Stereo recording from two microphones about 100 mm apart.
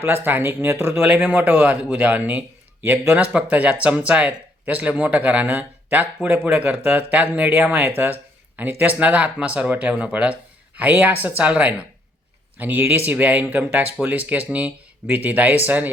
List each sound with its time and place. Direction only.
0.0 s speech: 20° right (ahead or behind)
1.0 s speech: 15° right (ahead or behind)